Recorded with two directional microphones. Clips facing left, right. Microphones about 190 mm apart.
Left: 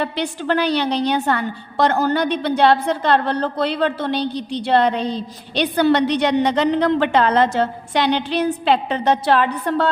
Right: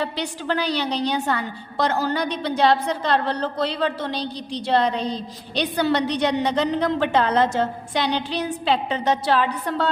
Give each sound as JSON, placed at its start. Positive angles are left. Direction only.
{"t": 0.0, "sound": "a woman's voice", "side_deg": 55}